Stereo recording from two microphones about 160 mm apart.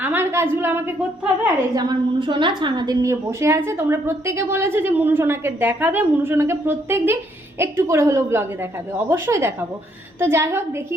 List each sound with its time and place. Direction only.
0.0 s a woman's voice: 15° right (ahead or behind)
1.7 s a woman's voice: 25° right (ahead or behind)